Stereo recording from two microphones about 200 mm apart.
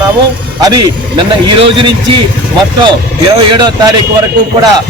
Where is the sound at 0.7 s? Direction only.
20° right (ahead or behind).